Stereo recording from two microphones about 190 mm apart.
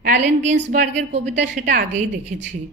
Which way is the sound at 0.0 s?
40° right (ahead or behind).